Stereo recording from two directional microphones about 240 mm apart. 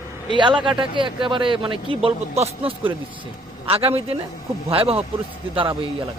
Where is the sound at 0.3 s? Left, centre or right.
Centre.